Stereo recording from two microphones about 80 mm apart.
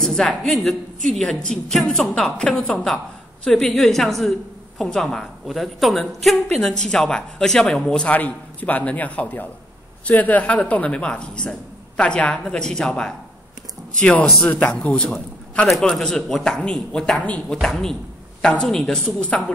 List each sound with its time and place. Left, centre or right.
0.0 s a woman's voice: centre
15.7 s a woman's voice: centre
17.6 s a woman's voice: centre